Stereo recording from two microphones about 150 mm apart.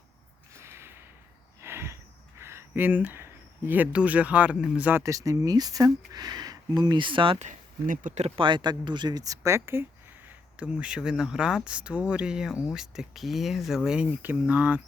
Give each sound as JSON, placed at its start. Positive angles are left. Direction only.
{"t": 0.5, "sound": "snort", "side_deg": -15}
{"t": 1.6, "sound": "a sound", "side_deg": -15}
{"t": 2.4, "sound": "speech", "side_deg": -15}
{"t": 7.3, "sound": "speech", "side_deg": -55}
{"t": 8.4, "sound": "speech", "side_deg": -30}